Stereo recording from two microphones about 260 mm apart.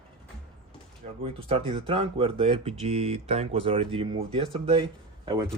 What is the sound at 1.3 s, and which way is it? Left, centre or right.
Speech, right.